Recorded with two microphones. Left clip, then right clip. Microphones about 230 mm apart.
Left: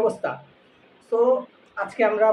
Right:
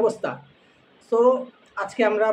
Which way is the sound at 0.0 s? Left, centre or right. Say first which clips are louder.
Right 1 dB; centre.